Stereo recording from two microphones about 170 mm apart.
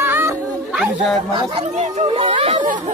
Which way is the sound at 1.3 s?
40° right (ahead or behind).